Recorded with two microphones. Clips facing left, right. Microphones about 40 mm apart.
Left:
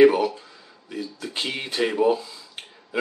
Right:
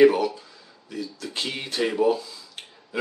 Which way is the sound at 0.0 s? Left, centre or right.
Centre.